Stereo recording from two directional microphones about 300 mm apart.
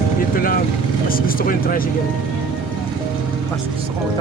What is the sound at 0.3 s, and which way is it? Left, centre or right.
A woman's voice, left.